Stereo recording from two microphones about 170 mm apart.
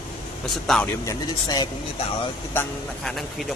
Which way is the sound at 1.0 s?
20° left (ahead or behind).